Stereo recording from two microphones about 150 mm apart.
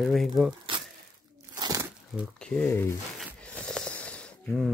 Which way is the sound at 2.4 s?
5° left (ahead or behind).